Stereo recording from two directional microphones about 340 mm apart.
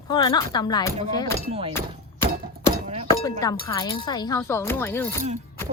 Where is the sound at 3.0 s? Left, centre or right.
Centre.